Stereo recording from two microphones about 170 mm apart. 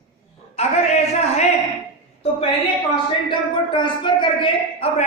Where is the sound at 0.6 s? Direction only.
40° left (ahead or behind).